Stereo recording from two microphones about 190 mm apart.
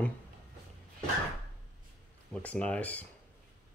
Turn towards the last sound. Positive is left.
turn(degrees=10)  # may be behind; listen again after turning